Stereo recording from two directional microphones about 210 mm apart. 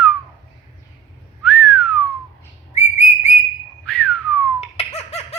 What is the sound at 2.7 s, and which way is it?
Whistling, 35° left (ahead or behind).